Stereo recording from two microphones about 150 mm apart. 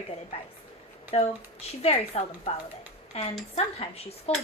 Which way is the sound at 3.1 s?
45° left (ahead or behind).